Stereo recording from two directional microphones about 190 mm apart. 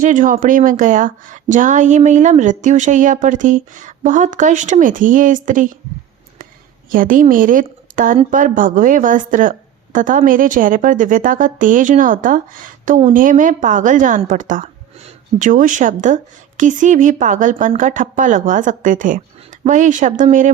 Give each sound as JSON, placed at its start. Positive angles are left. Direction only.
{"t": 0.0, "sound": "speech", "side_deg": -45}
{"t": 6.9, "sound": "a woman's voice", "side_deg": -45}